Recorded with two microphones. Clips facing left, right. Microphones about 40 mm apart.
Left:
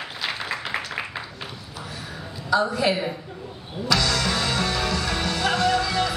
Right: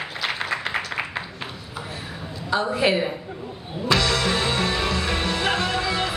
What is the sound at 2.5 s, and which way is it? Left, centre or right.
Speech, right.